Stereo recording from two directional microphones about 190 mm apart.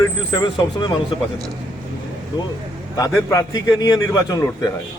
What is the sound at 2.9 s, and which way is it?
A man's voice, 15° left (ahead or behind).